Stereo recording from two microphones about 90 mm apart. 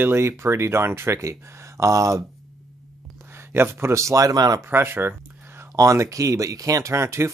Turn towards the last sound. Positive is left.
turn(degrees=-30)  # may be behind; listen again after turning